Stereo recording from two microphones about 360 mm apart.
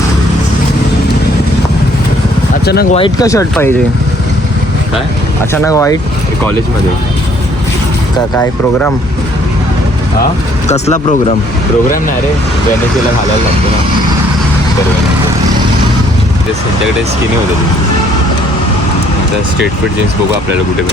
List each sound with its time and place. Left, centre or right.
2.6 s speech: left
3.0 s speech: centre
5.6 s speech: centre
10.7 s speech: centre